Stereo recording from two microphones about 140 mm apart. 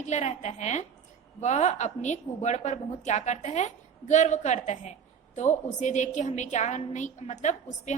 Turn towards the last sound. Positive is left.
turn(degrees=60)  # may be behind; listen again after turning